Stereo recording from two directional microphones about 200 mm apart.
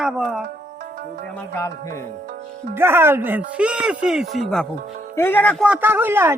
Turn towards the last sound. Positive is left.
turn(degrees=-10)  # may be behind; listen again after turning